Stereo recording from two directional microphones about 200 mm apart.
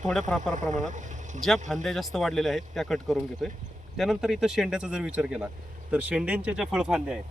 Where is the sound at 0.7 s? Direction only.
35° right (ahead or behind).